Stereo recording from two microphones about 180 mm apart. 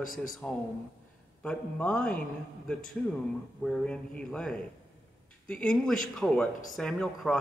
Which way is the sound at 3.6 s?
5° left (ahead or behind).